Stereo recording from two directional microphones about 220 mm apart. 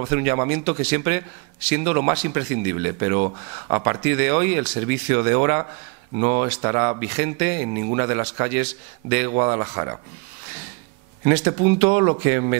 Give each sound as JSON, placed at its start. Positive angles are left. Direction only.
{"t": 0.0, "sound": "speech", "side_deg": -15}
{"t": 11.2, "sound": "speech", "side_deg": -15}